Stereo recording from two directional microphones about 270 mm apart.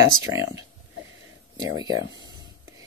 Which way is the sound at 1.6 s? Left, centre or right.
Centre.